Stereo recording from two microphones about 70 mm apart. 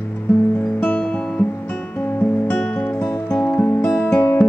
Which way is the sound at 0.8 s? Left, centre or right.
Centre.